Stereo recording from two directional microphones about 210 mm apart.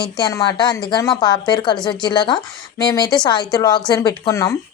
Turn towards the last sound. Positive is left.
turn(degrees=15)  # may be behind; listen again after turning